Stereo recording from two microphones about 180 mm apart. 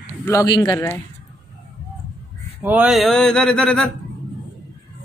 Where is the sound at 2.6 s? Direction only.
5° right (ahead or behind).